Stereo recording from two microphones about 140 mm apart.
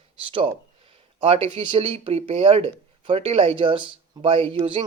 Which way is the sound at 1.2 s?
45° right (ahead or behind).